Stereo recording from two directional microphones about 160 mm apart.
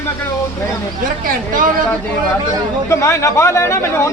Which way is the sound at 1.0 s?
55° right (ahead or behind).